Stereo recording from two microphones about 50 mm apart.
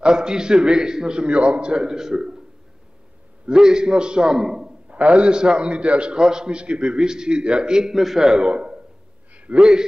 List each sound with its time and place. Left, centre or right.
0.0 s a man's voice: centre
3.4 s a man's voice: centre
4.8 s a man's voice: right